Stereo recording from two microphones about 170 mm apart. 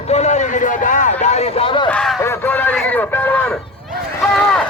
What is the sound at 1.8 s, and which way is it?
Speech, 5° left (ahead or behind).